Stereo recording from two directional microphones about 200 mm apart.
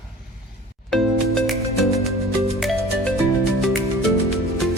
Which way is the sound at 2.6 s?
Centre (ahead or behind).